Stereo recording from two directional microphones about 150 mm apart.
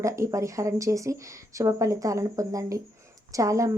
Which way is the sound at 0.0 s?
20° right (ahead or behind).